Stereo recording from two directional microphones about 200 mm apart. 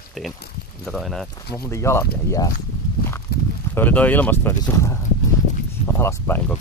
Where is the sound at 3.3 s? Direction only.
50° left (ahead or behind).